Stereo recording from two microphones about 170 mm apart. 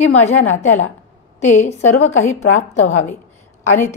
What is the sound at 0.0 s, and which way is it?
A woman's voice, 40° left (ahead or behind).